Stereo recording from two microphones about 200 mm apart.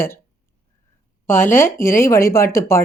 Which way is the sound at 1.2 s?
10° left (ahead or behind).